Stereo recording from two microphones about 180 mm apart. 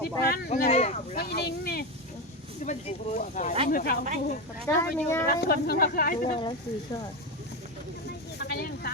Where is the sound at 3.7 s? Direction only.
55° left (ahead or behind).